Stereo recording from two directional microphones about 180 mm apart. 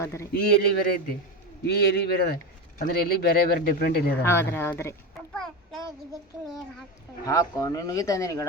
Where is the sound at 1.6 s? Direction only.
60° left (ahead or behind).